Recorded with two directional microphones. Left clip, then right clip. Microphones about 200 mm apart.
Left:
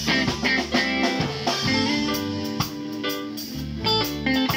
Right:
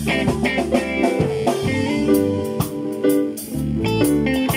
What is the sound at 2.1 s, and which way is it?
Music, 30° right (ahead or behind).